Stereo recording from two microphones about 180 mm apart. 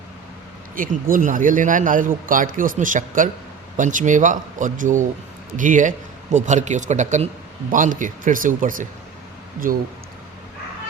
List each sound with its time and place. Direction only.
0.8 s a man's voice: 50° right (ahead or behind)